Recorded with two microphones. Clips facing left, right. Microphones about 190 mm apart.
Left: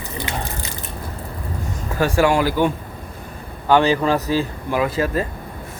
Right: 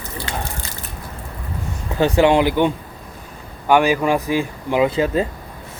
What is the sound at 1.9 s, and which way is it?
Speech, 20° right (ahead or behind).